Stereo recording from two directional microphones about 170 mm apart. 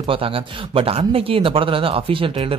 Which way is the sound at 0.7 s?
35° right (ahead or behind).